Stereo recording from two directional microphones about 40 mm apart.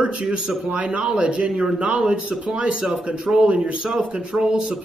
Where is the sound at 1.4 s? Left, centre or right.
Centre.